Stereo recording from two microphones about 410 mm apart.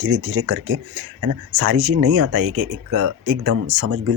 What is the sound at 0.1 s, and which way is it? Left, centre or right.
Speech, right.